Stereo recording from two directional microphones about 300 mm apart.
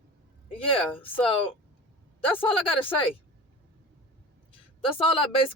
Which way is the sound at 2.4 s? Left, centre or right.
Centre.